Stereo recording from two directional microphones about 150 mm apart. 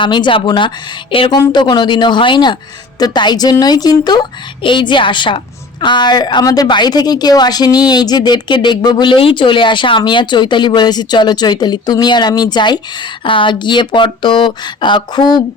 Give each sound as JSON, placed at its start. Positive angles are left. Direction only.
{"t": 0.0, "sound": "a woman's voice", "side_deg": 30}